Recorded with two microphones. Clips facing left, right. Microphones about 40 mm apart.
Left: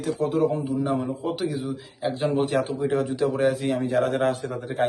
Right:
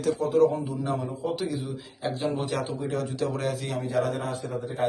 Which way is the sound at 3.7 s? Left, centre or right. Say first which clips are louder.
Left 4 dB; left.